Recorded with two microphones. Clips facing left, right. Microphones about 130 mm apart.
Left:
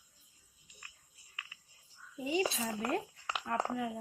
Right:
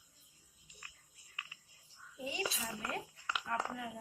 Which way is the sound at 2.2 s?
50° left (ahead or behind).